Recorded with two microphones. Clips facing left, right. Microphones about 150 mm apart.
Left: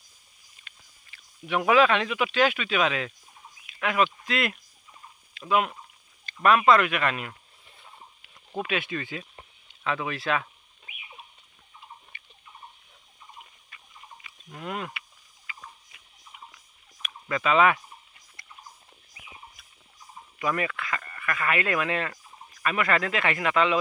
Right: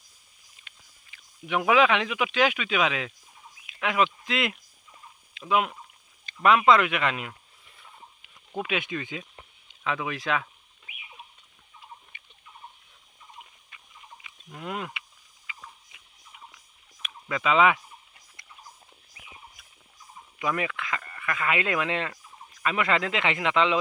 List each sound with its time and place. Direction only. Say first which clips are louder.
0.6 s a sound: left 1 dB; 20° right (ahead or behind)
1.5 s speech: left 1 dB; 10° right (ahead or behind)
6.2 s a sound: even; 15° right (ahead or behind)
6.7 s speech: even; 20° right (ahead or behind)
8.5 s speech: even; 15° right (ahead or behind)
12.1 s a sound: left 2 dB; 15° right (ahead or behind)
13.7 s fowl: left 1 dB; 10° right (ahead or behind)
17.2 s speech: even; 15° right (ahead or behind)
20.4 s speech: left 1 dB; 10° right (ahead or behind)